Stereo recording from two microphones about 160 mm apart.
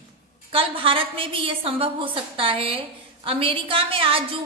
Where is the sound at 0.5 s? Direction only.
35° right (ahead or behind).